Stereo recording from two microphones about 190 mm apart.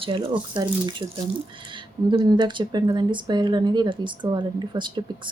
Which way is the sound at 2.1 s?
20° right (ahead or behind).